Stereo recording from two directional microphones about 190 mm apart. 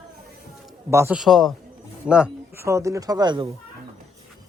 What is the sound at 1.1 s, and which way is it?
A man's voice, centre (ahead or behind).